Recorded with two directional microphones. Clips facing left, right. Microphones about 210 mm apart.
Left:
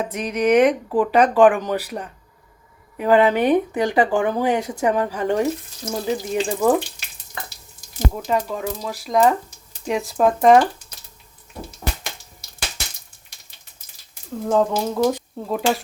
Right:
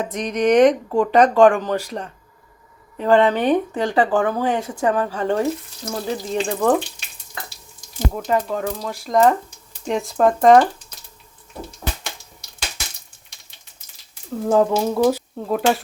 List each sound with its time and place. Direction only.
0.0 s speech: 5° left (ahead or behind)
8.1 s speech: centre (ahead or behind)
14.4 s speech: 5° right (ahead or behind)